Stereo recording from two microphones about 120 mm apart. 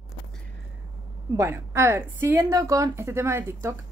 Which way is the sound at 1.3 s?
25° right (ahead or behind).